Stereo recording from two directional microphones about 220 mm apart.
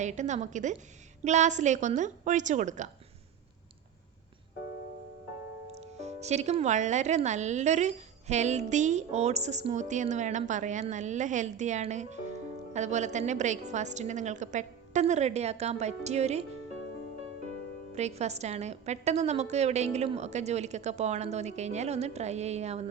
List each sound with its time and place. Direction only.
0.0 s speech: 30° right (ahead or behind)
5.7 s speech: 30° right (ahead or behind)
17.9 s speech: 30° right (ahead or behind)